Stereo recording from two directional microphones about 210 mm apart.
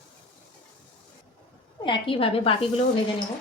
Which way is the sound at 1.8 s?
25° left (ahead or behind).